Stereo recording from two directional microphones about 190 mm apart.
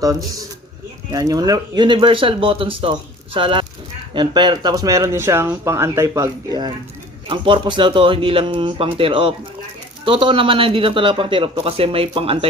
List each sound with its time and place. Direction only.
0.0 s speech: 20° right (ahead or behind)